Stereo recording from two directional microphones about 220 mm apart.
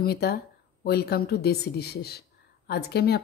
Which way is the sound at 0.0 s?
45° left (ahead or behind).